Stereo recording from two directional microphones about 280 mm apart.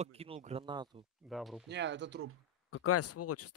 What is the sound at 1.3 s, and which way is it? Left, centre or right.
Speech, centre.